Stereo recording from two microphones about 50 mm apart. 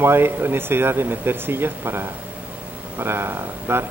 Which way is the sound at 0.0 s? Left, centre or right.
Right.